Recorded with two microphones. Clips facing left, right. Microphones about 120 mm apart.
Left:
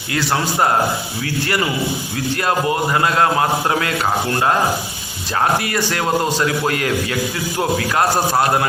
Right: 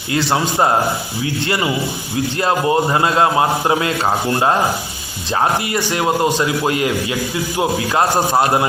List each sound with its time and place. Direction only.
0.1 s a man's voice: 25° right (ahead or behind)
5.5 s a man's voice: 20° right (ahead or behind)